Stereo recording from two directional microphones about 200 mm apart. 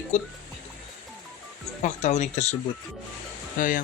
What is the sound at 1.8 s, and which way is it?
Speech, 35° left (ahead or behind).